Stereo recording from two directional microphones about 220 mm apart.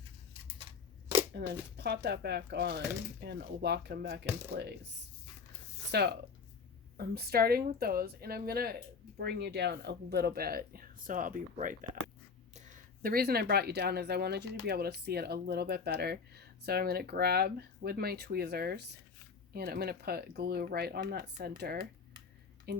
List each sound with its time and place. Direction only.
1.4 s speech: 50° right (ahead or behind)
5.9 s speech: 50° right (ahead or behind)